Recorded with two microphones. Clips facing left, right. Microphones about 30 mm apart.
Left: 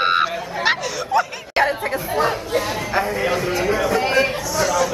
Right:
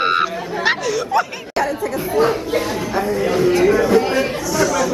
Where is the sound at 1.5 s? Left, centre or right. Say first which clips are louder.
Left 1 dB; left.